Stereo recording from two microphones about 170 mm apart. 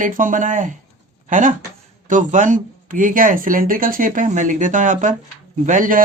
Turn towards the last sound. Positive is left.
turn(degrees=-50)  # may be behind; listen again after turning